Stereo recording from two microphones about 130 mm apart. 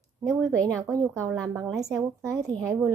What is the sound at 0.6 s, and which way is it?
A woman's voice, 25° right (ahead or behind).